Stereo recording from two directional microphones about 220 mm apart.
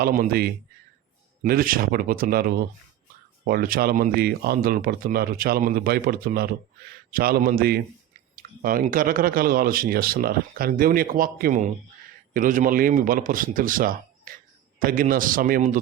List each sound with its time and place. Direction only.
0.0 s a man's voice: 40° right (ahead or behind)